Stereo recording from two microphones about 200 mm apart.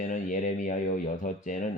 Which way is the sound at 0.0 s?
40° left (ahead or behind).